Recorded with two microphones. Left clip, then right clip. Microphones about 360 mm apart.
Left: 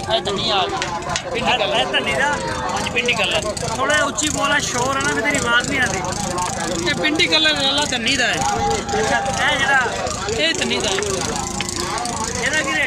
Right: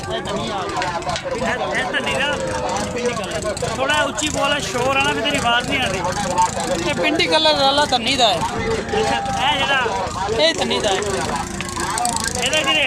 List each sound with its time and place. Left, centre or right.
4.4 s speech: centre
7.0 s speech: centre
9.4 s speech: centre